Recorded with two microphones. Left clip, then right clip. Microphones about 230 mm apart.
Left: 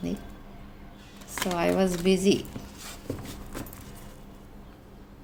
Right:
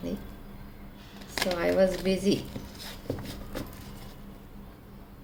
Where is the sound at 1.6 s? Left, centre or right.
Left.